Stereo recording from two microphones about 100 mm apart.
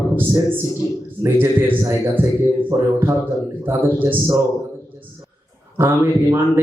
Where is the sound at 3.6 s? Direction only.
20° right (ahead or behind).